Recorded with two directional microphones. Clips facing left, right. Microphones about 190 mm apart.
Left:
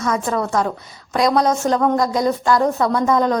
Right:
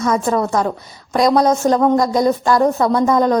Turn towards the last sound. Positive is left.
turn(degrees=-35)  # may be behind; listen again after turning